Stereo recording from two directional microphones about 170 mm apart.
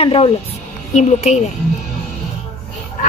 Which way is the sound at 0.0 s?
35° left (ahead or behind).